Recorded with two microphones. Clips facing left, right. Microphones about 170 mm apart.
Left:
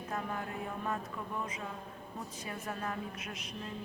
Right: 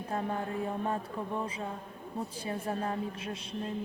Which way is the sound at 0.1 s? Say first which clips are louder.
Right 5 dB; 30° right (ahead or behind).